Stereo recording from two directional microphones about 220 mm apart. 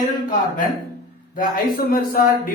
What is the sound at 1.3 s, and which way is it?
Speech, 40° left (ahead or behind).